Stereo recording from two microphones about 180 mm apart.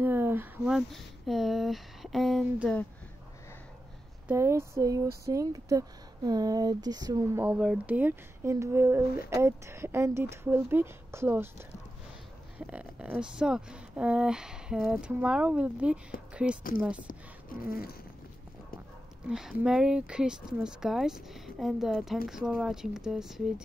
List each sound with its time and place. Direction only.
0.0 s speech: 10° right (ahead or behind); by 2.9 s 5° left (ahead or behind)
4.3 s speech: 15° right (ahead or behind)
7.4 s speech: 5° right (ahead or behind)
12.5 s speech: 5° right (ahead or behind)
17.1 s a sound: 50° left (ahead or behind)
19.2 s speech: 5° right (ahead or behind)